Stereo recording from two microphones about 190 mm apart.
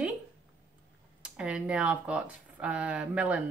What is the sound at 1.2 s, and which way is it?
A woman's voice, 5° right (ahead or behind).